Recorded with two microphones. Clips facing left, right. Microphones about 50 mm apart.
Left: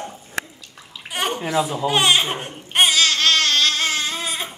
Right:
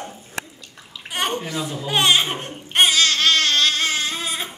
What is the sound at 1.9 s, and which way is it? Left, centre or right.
Babbling, centre.